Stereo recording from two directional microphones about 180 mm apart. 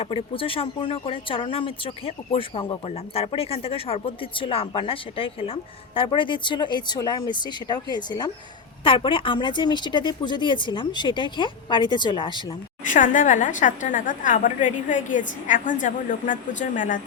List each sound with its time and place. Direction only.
0.0 s speech: 30° left (ahead or behind)
12.8 s a woman's voice: 45° left (ahead or behind)